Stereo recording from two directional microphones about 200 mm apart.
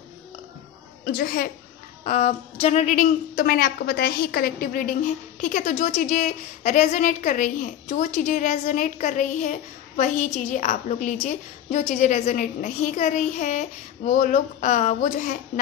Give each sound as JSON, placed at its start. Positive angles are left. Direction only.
{"t": 1.0, "sound": "a woman's voice", "side_deg": 50}
{"t": 2.0, "sound": "a woman's voice", "side_deg": 30}